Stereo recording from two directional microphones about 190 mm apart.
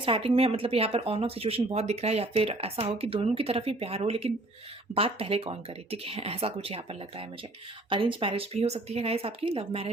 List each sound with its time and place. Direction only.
0.0 s speech: 30° right (ahead or behind)